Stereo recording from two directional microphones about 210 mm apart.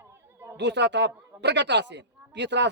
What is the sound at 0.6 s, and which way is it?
A man's voice, 55° right (ahead or behind).